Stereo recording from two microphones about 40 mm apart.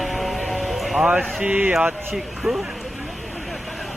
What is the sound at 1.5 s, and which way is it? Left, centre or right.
Speech, right.